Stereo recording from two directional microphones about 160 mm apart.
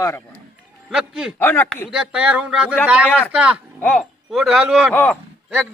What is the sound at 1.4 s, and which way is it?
Speech, 15° left (ahead or behind).